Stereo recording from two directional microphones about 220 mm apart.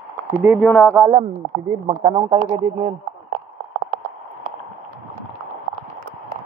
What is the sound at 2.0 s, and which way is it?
Speech, 20° right (ahead or behind).